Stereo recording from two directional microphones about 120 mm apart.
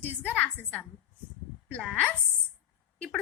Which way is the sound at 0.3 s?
15° left (ahead or behind).